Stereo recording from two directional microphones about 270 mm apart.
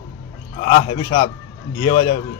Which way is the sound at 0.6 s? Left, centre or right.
Centre.